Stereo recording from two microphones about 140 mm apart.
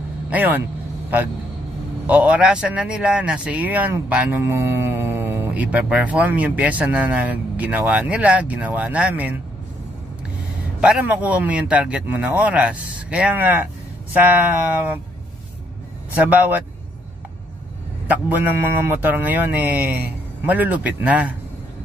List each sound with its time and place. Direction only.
0.3 s a man's voice: 10° right (ahead or behind)
2.0 s a man's voice: 10° right (ahead or behind)
10.8 s a man's voice: 10° right (ahead or behind)
16.2 s a man's voice: 10° right (ahead or behind)
18.0 s a man's voice: 10° right (ahead or behind)